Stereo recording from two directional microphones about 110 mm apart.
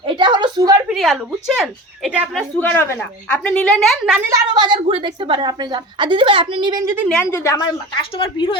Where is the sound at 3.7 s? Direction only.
Centre (ahead or behind).